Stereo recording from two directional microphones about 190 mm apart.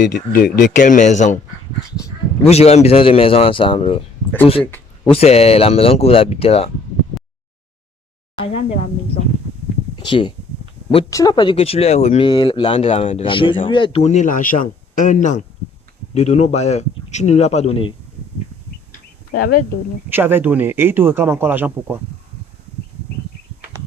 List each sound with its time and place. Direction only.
0.0 s speech: 55° left (ahead or behind)
2.4 s speech: 35° left (ahead or behind)
5.0 s speech: 30° left (ahead or behind)
8.4 s speech: 30° left (ahead or behind)
9.9 s speech: 25° left (ahead or behind)
12.3 s speech: 25° left (ahead or behind)
18.9 s a sound: 50° left (ahead or behind)
20.1 s speech: 10° right (ahead or behind)